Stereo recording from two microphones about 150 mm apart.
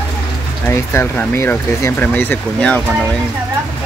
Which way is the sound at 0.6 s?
15° left (ahead or behind).